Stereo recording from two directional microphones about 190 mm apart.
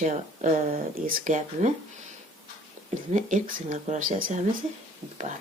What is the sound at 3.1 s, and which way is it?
Speech, 40° right (ahead or behind).